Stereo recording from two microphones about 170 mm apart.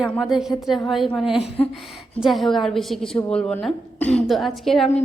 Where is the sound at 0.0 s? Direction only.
Centre (ahead or behind).